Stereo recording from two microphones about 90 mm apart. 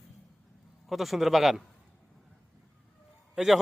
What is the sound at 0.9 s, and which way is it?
Speech, centre (ahead or behind).